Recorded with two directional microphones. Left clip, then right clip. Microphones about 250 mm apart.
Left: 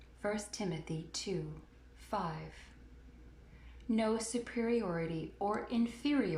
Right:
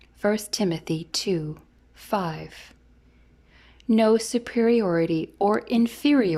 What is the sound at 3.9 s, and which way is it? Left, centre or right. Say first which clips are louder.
A woman's voice: right 14 dB; right.